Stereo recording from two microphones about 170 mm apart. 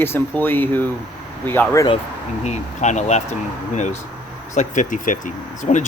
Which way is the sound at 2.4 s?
45° left (ahead or behind).